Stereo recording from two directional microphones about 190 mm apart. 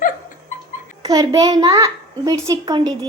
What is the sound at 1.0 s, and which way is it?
A child's voice, 20° right (ahead or behind).